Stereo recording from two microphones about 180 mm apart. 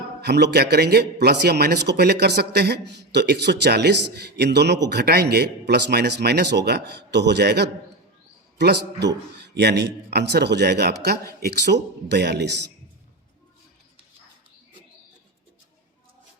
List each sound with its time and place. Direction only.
0.2 s speech: 65° right (ahead or behind)